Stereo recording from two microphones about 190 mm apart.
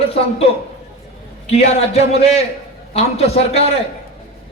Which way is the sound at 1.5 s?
35° left (ahead or behind).